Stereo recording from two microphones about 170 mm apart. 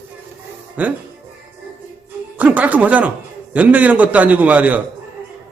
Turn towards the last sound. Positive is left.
turn(degrees=-10)  # may be behind; listen again after turning